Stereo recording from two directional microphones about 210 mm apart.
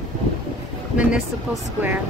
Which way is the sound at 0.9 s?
5° right (ahead or behind).